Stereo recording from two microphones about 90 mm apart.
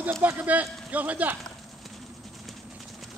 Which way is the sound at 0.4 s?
15° right (ahead or behind).